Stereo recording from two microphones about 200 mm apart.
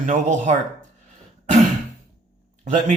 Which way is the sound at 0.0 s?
35° right (ahead or behind).